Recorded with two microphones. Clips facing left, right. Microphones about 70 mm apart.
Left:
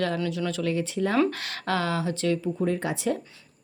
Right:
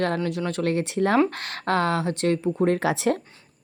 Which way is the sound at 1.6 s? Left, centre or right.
Right.